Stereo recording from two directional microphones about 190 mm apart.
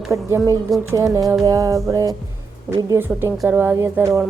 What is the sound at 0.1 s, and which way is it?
Speech, 15° right (ahead or behind).